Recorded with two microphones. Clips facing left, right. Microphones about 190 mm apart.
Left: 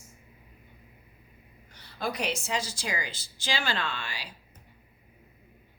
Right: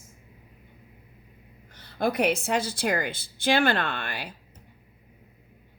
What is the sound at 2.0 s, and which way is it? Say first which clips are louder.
Speech: right 8 dB; 55° right (ahead or behind).